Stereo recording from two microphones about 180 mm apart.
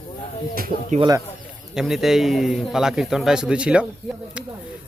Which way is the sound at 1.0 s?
20° right (ahead or behind).